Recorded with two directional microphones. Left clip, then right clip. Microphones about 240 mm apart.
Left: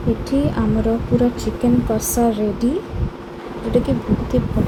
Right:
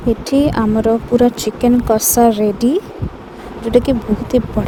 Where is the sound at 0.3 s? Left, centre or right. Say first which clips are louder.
Right 7 dB; right.